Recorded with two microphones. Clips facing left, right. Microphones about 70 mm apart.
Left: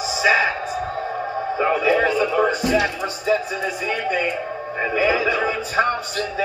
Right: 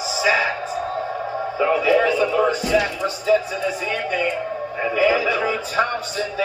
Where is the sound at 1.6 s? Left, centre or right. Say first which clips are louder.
Right 1 dB; left.